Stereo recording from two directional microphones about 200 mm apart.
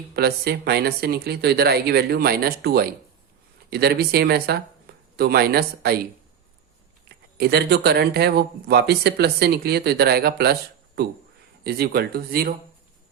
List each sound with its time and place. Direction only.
0.2 s speech: 55° right (ahead or behind)
7.3 s speech: 55° right (ahead or behind)